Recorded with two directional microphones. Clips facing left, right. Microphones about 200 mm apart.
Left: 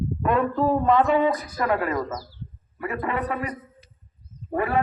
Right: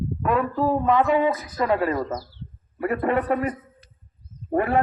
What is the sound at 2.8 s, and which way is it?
A man's voice, 55° right (ahead or behind).